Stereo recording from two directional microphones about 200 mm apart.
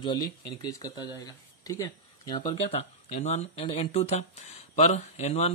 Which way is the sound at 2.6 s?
35° left (ahead or behind).